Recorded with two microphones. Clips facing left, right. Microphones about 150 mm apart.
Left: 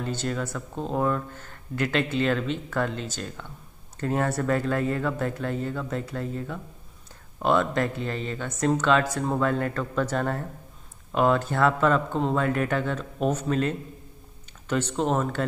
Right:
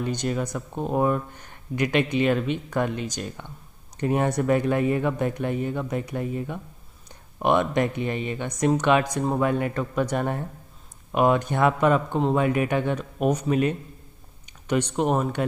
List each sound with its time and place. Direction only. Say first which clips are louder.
0.0 s speech: right 3 dB; 15° right (ahead or behind)